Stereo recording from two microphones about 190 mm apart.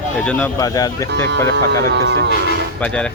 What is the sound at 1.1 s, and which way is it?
Speech, 60° right (ahead or behind).